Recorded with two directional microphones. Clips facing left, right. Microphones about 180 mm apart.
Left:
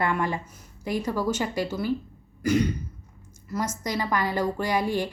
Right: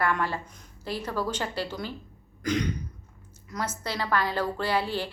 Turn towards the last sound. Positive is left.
turn(degrees=15)  # may be behind; listen again after turning